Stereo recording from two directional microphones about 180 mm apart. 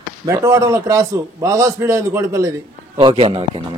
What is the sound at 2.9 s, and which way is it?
Speech, 30° right (ahead or behind).